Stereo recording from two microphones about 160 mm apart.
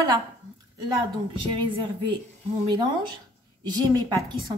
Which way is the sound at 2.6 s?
30° right (ahead or behind).